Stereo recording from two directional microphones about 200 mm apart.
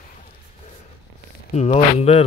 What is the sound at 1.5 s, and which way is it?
Speech, 35° left (ahead or behind).